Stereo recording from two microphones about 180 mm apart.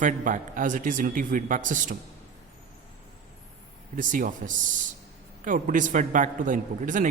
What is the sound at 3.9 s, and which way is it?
Speech, 45° right (ahead or behind).